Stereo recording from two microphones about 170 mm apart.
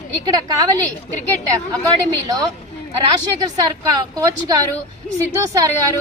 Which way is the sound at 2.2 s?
25° right (ahead or behind).